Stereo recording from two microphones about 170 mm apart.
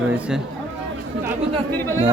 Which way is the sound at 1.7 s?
15° left (ahead or behind).